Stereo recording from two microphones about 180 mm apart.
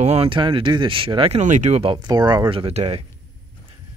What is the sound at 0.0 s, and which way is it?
Speech, 35° right (ahead or behind).